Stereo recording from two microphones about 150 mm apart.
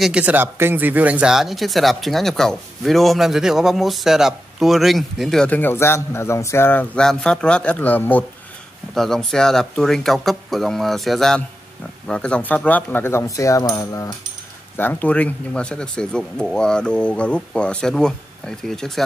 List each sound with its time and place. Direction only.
0.0 s speech: 10° right (ahead or behind); by 14.1 s 25° left (ahead or behind)
14.8 s speech: 10° left (ahead or behind)